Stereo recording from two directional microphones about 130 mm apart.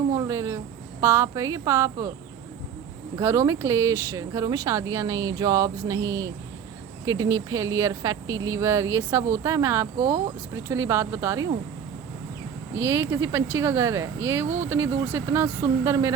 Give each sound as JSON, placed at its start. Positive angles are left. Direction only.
{"t": 0.1, "sound": "a sound", "side_deg": -25}
{"t": 1.0, "sound": "speech", "side_deg": -20}
{"t": 3.2, "sound": "speech", "side_deg": -25}
{"t": 12.7, "sound": "speech", "side_deg": -20}